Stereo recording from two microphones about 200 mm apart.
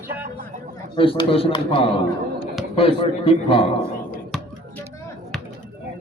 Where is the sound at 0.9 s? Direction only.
25° left (ahead or behind).